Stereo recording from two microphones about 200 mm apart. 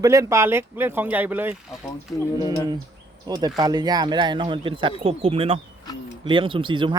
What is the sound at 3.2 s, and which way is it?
Speech, 20° right (ahead or behind).